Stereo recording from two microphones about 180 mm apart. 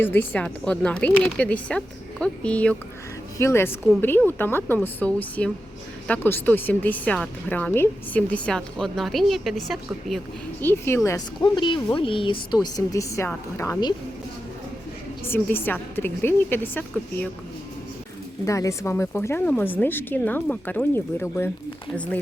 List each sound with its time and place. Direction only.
0.0 s speech: 10° left (ahead or behind)
10.6 s speech: 15° left (ahead or behind)
11.3 s speech: 25° left (ahead or behind)
15.3 s speech: 10° left (ahead or behind)
18.4 s speech: 20° left (ahead or behind)